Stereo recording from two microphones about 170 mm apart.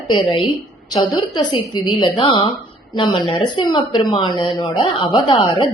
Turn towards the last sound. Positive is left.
turn(degrees=30)  # may be behind; listen again after turning